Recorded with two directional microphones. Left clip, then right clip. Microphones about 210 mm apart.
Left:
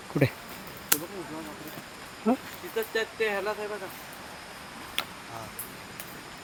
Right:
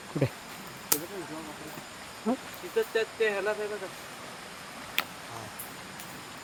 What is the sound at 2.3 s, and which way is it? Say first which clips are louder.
Speech: left 4 dB; 30° left (ahead or behind).